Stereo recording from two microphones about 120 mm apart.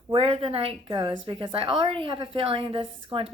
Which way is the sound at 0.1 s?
55° right (ahead or behind).